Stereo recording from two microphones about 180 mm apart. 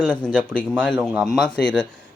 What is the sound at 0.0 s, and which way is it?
Speech, 5° left (ahead or behind).